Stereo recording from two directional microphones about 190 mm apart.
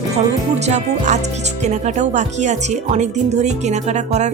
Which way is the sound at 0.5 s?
35° right (ahead or behind).